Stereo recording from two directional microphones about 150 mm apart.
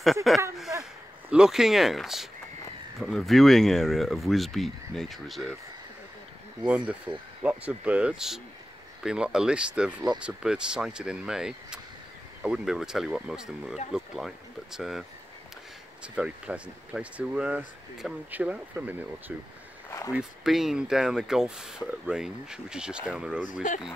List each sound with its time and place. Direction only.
0.0 s speech: centre (ahead or behind)
6.6 s speech: 10° right (ahead or behind)
23.4 s speech: 60° left (ahead or behind)